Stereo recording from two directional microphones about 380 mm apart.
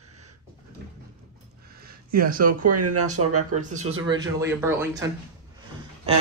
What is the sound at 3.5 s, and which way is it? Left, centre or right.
Speech, centre.